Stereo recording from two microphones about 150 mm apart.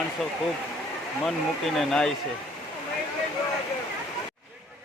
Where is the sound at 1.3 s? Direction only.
Centre (ahead or behind).